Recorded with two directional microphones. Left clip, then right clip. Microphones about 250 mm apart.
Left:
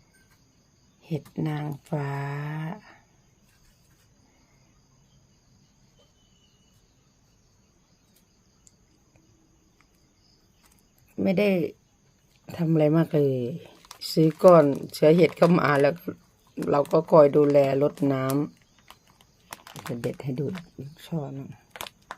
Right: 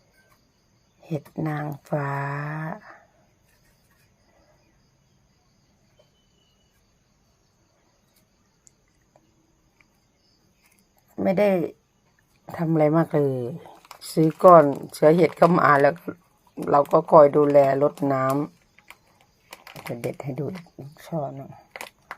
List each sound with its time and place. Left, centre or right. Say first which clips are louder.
1.1 s speech: right 3 dB; centre
11.2 s speech: right 3 dB; centre
14.8 s speech: right 2 dB; centre
15.3 s speech: right 4 dB; centre
20.9 s speech: right 6 dB; centre